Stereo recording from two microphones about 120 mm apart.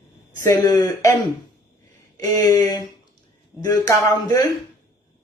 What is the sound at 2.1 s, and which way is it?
Speech, 30° left (ahead or behind).